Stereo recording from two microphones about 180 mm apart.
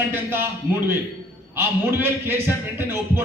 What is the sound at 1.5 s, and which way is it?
Speech, 10° right (ahead or behind).